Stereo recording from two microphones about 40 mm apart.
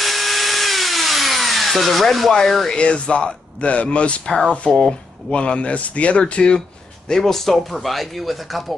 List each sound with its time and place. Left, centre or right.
0.0 s drill: centre
2.6 s speech: left
7.1 s speech: centre